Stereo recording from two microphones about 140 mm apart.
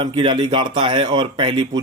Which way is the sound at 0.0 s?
35° right (ahead or behind).